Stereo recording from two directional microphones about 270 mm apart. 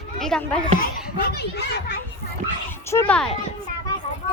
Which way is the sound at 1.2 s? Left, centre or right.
Left.